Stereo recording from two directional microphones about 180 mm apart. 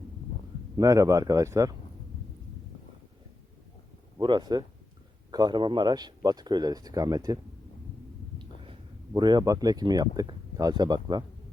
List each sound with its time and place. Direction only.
0.8 s speech: 20° right (ahead or behind)
4.2 s speech: 25° right (ahead or behind)
9.1 s speech: 25° right (ahead or behind)